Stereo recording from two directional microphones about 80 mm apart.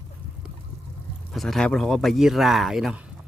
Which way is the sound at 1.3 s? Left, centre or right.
Centre.